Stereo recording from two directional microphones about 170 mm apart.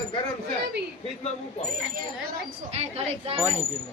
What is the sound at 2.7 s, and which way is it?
Speech, 40° right (ahead or behind).